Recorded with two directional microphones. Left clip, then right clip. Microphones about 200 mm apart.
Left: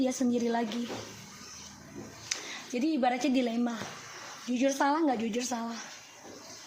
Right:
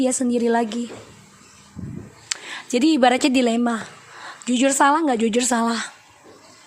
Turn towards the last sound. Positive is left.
turn(degrees=-35)  # may be behind; listen again after turning